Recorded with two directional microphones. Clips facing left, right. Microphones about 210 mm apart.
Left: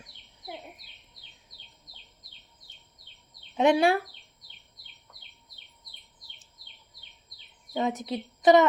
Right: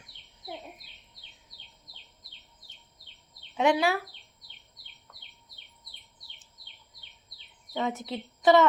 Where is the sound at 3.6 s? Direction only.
25° left (ahead or behind).